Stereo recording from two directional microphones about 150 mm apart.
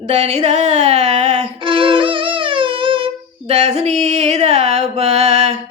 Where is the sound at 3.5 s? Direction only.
45° right (ahead or behind).